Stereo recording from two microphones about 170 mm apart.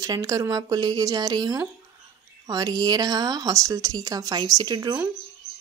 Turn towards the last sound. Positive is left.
turn(degrees=-25)  # may be behind; listen again after turning